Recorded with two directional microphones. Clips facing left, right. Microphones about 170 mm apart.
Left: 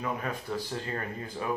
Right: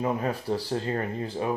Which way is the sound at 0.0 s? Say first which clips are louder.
Right 6 dB; 35° right (ahead or behind).